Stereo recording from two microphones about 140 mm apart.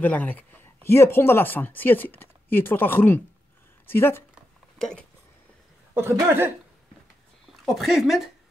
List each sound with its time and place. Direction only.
0.0 s speech: 10° left (ahead or behind)
4.7 s speech: 5° left (ahead or behind)
5.9 s speech: 15° right (ahead or behind)
7.6 s speech: centre (ahead or behind)